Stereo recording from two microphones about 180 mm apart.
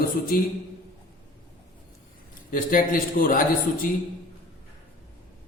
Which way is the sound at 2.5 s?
50° left (ahead or behind).